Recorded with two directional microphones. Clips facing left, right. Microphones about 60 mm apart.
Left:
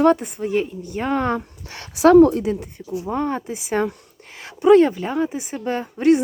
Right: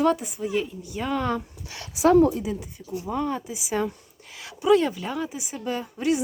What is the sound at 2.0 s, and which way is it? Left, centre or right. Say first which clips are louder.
Speech: left 6 dB; left.